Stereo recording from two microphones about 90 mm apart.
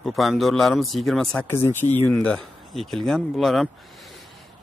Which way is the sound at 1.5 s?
25° left (ahead or behind).